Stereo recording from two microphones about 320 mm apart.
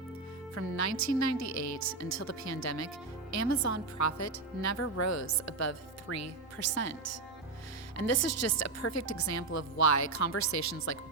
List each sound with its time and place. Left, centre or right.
0.5 s a woman's voice: left